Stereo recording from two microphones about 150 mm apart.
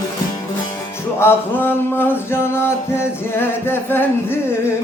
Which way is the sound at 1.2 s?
15° left (ahead or behind).